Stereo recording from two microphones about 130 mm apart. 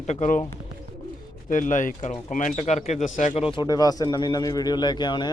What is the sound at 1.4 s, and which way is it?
Speech, 80° left.